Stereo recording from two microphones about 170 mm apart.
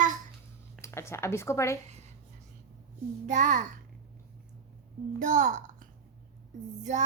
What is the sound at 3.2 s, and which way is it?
Speech, 45° right (ahead or behind).